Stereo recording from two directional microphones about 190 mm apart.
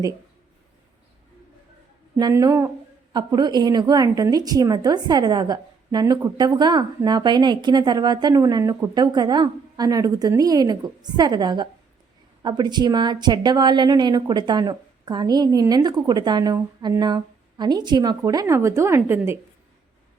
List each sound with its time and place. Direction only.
2.1 s a woman's voice: 20° right (ahead or behind)